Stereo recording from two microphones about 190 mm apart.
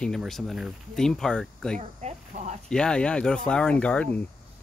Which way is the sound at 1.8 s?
35° right (ahead or behind).